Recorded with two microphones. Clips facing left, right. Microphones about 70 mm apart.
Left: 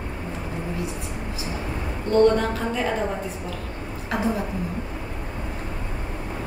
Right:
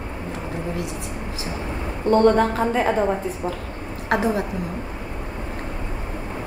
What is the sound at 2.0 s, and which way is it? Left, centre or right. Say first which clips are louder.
Speech: right 2 dB; right.